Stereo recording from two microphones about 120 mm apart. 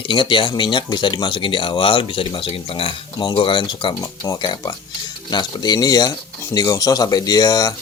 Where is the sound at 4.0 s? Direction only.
30° left (ahead or behind).